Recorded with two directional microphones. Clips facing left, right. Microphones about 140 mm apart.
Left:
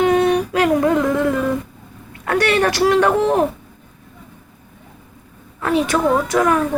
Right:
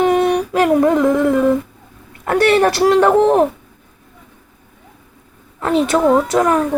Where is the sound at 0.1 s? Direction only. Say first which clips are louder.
Right 1 dB; 25° right (ahead or behind).